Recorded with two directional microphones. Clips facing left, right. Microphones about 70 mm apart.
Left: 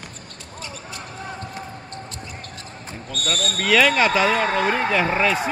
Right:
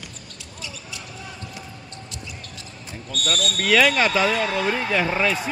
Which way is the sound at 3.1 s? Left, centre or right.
Left.